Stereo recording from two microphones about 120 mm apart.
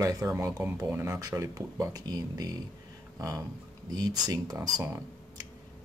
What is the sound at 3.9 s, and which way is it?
Speech, 30° right (ahead or behind).